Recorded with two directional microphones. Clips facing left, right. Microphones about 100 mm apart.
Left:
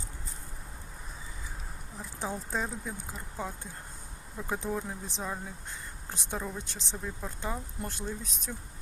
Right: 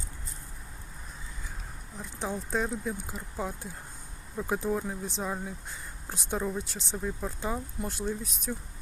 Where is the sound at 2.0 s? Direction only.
Centre (ahead or behind).